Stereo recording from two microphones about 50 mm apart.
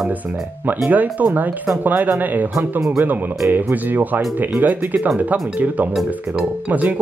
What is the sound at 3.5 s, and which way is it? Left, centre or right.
Speech, right.